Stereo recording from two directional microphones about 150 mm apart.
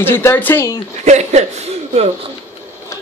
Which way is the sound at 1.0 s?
50° right (ahead or behind).